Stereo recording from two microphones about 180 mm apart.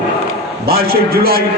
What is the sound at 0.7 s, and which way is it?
Speech, 55° right (ahead or behind).